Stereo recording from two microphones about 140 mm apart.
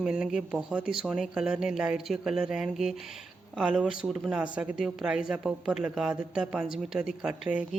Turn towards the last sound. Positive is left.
turn(degrees=-10)  # may be behind; listen again after turning